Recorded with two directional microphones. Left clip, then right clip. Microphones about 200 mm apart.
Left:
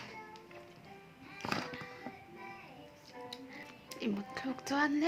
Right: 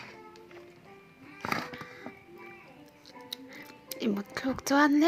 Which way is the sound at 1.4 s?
15° right (ahead or behind).